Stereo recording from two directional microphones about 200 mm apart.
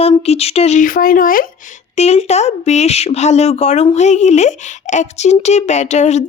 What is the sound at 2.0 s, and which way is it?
Speech, 35° left (ahead or behind).